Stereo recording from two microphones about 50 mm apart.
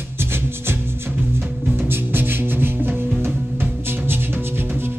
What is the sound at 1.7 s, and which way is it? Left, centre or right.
Music, right.